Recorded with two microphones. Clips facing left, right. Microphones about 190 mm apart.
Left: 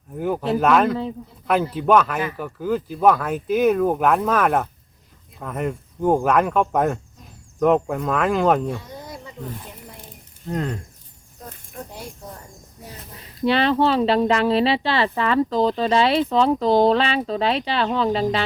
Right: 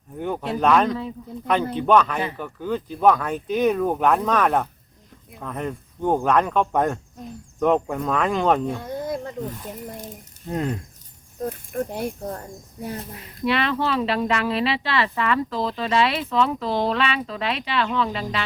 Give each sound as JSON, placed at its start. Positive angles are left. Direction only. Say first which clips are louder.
{"t": 0.2, "sound": "speech", "louder": "left 3 dB", "side_deg": 5}
{"t": 8.8, "sound": "a sound", "louder": "right 9 dB", "side_deg": -55}
{"t": 11.9, "sound": "speech", "louder": "right 9 dB", "side_deg": -55}
{"t": 13.4, "sound": "speech", "louder": "left 5 dB", "side_deg": 30}